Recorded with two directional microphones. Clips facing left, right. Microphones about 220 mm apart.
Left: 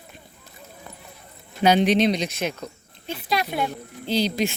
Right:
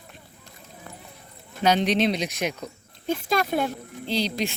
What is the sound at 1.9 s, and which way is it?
Speech, 5° right (ahead or behind).